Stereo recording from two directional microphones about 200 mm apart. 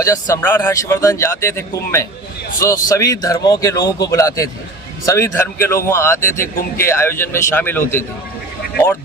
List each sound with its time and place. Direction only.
0.0 s speech: 15° left (ahead or behind)